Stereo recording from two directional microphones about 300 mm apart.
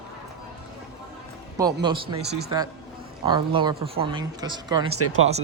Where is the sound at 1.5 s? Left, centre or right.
Centre.